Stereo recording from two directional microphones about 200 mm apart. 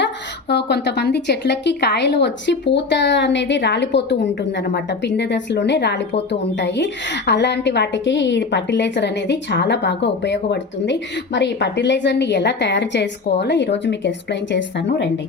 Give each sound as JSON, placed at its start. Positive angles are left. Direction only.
{"t": 0.0, "sound": "a woman's voice", "side_deg": 55}